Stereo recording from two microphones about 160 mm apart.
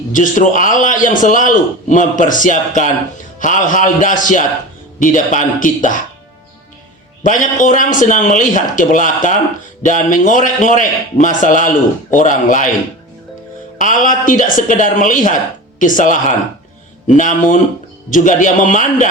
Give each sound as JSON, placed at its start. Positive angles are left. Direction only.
{"t": 0.1, "sound": "a man's voice", "side_deg": 55}
{"t": 7.2, "sound": "a man's voice", "side_deg": 55}
{"t": 13.7, "sound": "a man's voice", "side_deg": 55}